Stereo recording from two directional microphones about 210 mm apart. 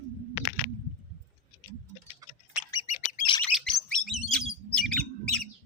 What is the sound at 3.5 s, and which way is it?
Bird, centre (ahead or behind).